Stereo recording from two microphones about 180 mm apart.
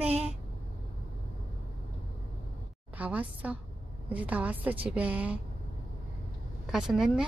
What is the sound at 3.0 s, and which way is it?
Speech, 10° right (ahead or behind).